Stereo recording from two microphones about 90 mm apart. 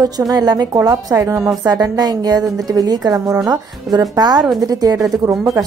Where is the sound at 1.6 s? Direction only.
45° right (ahead or behind).